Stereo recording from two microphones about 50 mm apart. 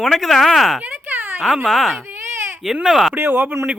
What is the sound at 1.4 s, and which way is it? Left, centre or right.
Speech, centre.